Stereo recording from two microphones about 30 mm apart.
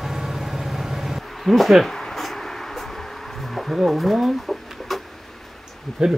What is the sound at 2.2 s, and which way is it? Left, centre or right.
Vehicle, centre.